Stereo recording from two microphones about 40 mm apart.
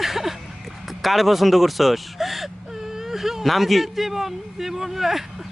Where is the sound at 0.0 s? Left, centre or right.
Centre.